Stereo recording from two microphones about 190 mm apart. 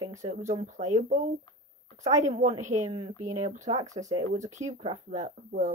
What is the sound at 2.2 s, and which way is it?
Speech, 40° right (ahead or behind).